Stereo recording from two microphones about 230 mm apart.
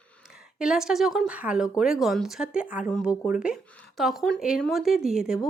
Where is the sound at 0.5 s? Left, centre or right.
Centre.